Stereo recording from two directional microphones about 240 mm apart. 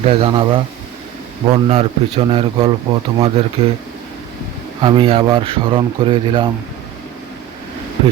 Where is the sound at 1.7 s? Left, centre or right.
Right.